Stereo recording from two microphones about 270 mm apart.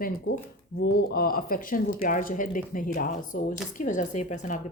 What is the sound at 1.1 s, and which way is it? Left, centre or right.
A woman's voice, left.